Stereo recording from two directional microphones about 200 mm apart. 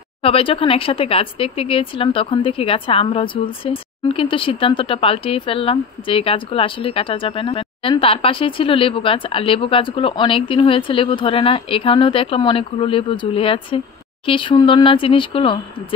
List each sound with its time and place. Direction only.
0.2 s speech: 25° left (ahead or behind)